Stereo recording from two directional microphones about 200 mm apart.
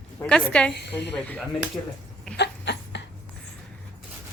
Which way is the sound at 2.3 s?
55° left (ahead or behind).